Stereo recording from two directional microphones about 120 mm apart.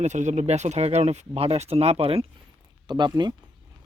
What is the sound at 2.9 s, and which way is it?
Speech, 35° right (ahead or behind).